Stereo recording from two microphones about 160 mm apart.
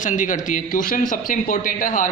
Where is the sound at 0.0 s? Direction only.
55° left (ahead or behind).